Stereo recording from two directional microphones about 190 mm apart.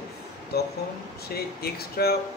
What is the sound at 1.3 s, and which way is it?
Speech, 55° left (ahead or behind).